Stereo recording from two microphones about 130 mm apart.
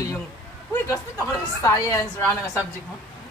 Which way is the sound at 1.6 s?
25° left (ahead or behind).